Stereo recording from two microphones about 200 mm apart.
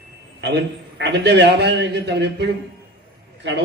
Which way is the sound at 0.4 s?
60° right (ahead or behind).